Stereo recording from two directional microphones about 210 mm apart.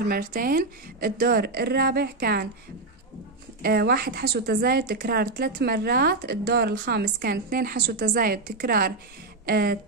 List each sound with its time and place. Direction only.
0.0 s speech: 45° right (ahead or behind)
3.6 s speech: 45° right (ahead or behind)